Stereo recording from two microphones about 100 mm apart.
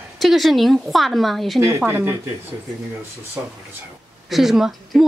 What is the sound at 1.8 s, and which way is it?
Speech, 20° right (ahead or behind).